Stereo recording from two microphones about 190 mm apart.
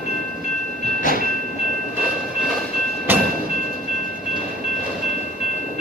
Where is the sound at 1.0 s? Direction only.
45° left (ahead or behind).